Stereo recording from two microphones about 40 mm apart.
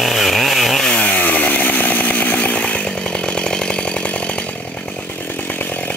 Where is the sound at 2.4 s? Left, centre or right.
Left.